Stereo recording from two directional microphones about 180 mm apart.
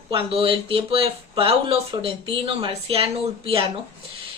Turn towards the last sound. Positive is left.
turn(degrees=-30)  # may be behind; listen again after turning